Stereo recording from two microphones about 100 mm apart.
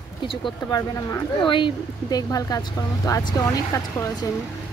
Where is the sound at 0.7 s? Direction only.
35° left (ahead or behind).